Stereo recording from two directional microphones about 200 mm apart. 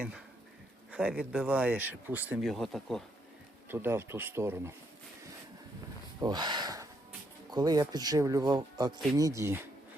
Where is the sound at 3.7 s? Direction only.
10° right (ahead or behind).